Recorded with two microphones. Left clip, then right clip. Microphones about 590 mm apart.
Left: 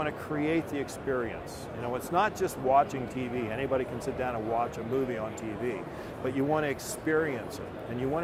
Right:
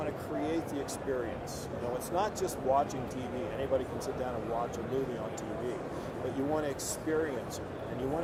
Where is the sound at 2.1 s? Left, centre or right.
Left.